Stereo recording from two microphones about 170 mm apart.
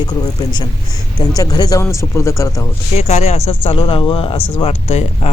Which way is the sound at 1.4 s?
20° left (ahead or behind).